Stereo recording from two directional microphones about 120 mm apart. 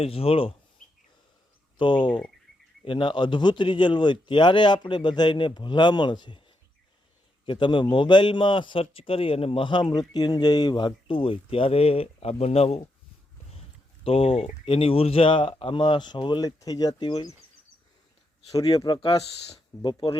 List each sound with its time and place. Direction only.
0.0 s speech: 55° left (ahead or behind)
1.8 s a man's voice: 40° left (ahead or behind)
7.4 s speech: 40° left (ahead or behind); by 12.9 s 55° left (ahead or behind)
14.0 s speech: 50° left (ahead or behind)
18.5 s a man's voice: 30° left (ahead or behind)